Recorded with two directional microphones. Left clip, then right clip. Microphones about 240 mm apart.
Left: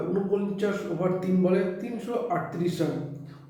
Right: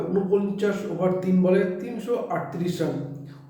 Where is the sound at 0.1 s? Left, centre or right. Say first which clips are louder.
Right 6 dB; centre.